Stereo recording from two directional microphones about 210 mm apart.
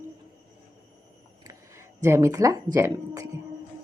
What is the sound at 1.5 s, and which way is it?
Speech, 15° right (ahead or behind).